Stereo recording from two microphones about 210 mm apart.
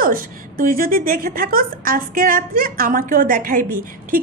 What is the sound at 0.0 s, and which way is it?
A woman's voice, 45° right (ahead or behind).